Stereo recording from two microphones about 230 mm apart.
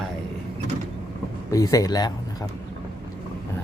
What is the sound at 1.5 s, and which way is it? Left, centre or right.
Speech, centre.